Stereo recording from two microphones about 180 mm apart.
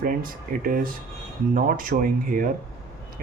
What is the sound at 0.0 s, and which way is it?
Speech, 50° right (ahead or behind).